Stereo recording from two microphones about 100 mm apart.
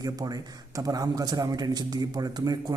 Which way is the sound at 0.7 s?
40° right (ahead or behind).